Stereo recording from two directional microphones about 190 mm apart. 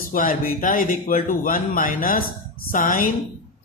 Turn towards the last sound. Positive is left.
turn(degrees=45)  # may be behind; listen again after turning